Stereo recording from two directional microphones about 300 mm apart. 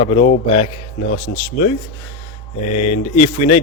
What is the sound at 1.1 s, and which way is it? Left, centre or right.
Speech, left.